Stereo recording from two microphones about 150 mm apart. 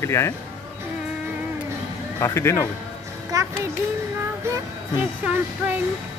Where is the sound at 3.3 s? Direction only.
25° right (ahead or behind).